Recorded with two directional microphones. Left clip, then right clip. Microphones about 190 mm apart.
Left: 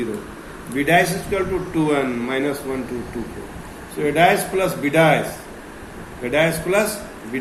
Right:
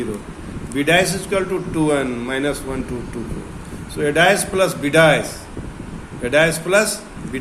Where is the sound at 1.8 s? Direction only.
60° right (ahead or behind).